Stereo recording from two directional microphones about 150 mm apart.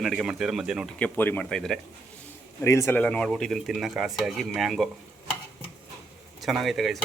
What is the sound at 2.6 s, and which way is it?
Speech, 20° left (ahead or behind).